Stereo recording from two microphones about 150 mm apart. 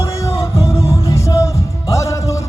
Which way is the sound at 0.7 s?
20° left (ahead or behind).